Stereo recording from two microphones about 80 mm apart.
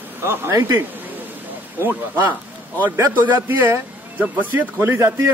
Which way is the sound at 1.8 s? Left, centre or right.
Right.